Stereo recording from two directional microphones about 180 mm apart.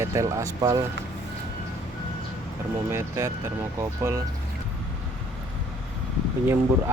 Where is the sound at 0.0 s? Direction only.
15° right (ahead or behind).